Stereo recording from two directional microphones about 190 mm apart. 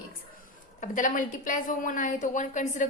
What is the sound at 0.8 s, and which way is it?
A woman's voice, 45° left (ahead or behind).